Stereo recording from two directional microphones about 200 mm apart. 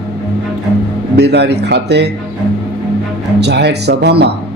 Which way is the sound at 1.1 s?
55° right (ahead or behind).